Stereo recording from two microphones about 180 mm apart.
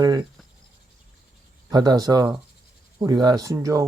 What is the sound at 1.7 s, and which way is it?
Speech, 20° right (ahead or behind).